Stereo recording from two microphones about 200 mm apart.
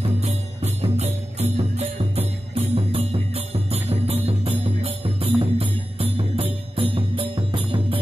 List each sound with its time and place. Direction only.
0.0 s music: 35° right (ahead or behind)